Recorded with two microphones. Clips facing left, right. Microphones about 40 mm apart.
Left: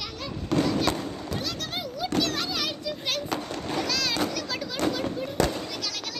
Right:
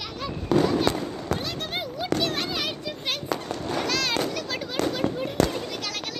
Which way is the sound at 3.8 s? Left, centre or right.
Right.